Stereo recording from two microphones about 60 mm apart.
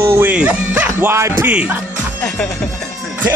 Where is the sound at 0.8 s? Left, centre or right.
Right.